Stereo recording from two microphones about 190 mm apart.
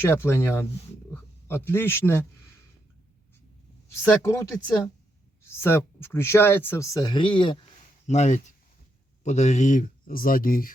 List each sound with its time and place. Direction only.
0.0 s a man's voice: 10° left (ahead or behind)
4.1 s speech: 15° left (ahead or behind)
5.5 s speech: 15° left (ahead or behind)
8.0 s speech: 35° left (ahead or behind)